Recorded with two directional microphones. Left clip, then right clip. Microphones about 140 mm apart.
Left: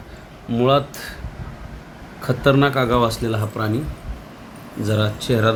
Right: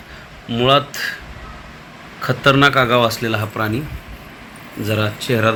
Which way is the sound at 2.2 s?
5° right (ahead or behind).